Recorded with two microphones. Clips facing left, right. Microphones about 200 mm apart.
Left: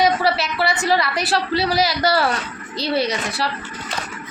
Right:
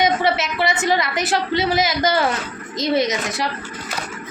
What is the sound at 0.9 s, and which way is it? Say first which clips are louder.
Speech: even; 20° right (ahead or behind).